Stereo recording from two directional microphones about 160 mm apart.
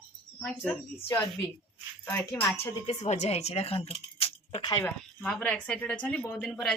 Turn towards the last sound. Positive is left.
turn(degrees=5)  # may be behind; listen again after turning